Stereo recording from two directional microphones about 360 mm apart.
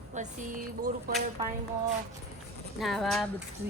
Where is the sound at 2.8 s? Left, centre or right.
Centre.